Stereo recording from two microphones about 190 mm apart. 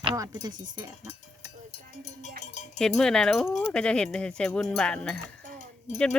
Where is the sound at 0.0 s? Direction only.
20° right (ahead or behind).